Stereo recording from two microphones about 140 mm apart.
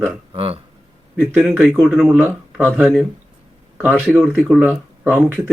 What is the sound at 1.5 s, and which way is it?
Speech, 10° right (ahead or behind).